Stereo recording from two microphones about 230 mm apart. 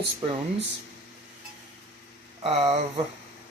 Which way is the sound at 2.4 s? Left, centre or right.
Right.